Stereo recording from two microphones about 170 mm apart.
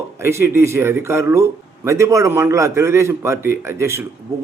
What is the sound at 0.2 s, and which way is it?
A man's voice, 15° right (ahead or behind).